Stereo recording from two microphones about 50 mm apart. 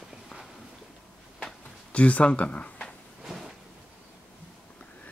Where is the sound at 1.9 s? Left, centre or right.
Left.